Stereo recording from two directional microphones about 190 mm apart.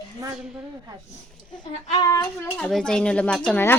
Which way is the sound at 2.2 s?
5° left (ahead or behind).